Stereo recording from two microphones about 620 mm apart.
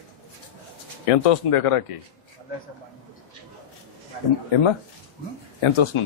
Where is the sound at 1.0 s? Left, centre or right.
Left.